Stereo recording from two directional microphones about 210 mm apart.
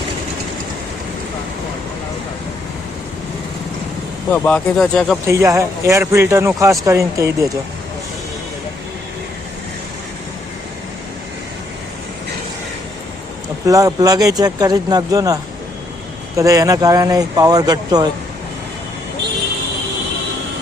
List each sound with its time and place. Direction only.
4.3 s speech: 5° left (ahead or behind)
5.3 s speech: 15° right (ahead or behind)
13.7 s speech: 15° right (ahead or behind)
16.4 s speech: 15° right (ahead or behind)